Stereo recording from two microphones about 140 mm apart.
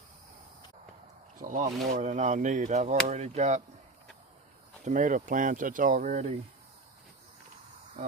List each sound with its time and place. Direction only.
1.4 s speech: 70° right (ahead or behind)
1.9 s speech: 60° right (ahead or behind)
4.9 s speech: 65° right (ahead or behind)